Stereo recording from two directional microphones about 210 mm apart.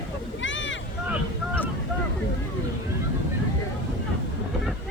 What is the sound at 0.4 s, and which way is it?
Vehicle, 60° left (ahead or behind).